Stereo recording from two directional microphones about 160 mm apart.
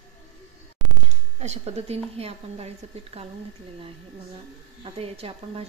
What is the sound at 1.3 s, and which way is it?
Speech, 45° right (ahead or behind).